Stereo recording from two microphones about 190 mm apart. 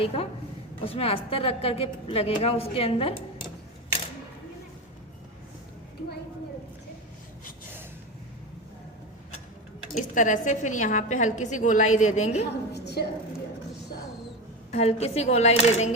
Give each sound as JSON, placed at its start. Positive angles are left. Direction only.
{"t": 0.0, "sound": "a woman's voice", "side_deg": 30}
{"t": 9.9, "sound": "a woman's voice", "side_deg": 40}
{"t": 12.7, "sound": "a sound", "side_deg": 60}
{"t": 14.7, "sound": "a woman's voice", "side_deg": 35}